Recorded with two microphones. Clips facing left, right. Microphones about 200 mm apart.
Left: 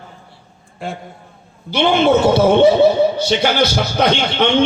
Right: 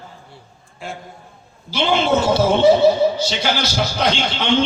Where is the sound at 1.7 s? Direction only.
60° left (ahead or behind).